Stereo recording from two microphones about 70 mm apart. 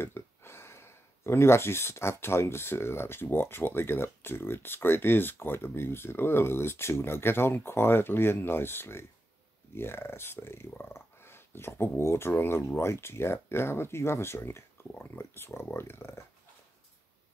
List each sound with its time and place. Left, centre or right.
0.0 s speech: left